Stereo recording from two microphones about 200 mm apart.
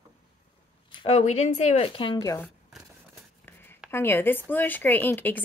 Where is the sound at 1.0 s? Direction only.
35° left (ahead or behind).